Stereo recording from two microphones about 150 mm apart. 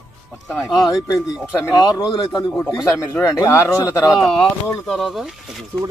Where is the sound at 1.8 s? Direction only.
30° left (ahead or behind).